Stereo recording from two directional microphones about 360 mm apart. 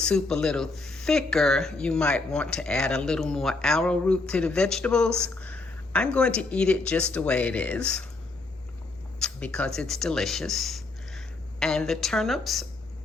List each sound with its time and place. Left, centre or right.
0.0 s speech: centre
9.2 s speech: centre